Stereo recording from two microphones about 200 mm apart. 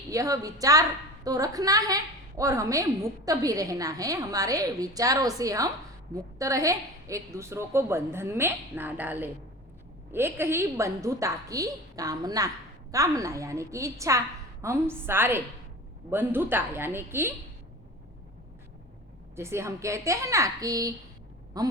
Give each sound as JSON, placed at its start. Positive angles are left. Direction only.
{"t": 0.1, "sound": "a woman's voice", "side_deg": -15}
{"t": 19.4, "sound": "a woman's voice", "side_deg": -15}